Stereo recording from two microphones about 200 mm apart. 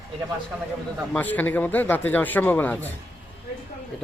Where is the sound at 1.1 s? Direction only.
10° left (ahead or behind).